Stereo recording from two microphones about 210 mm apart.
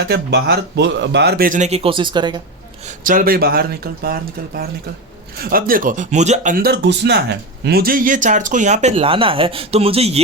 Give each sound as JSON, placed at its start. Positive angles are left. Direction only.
{"t": 0.1, "sound": "speech", "side_deg": -50}
{"t": 2.8, "sound": "speech", "side_deg": -40}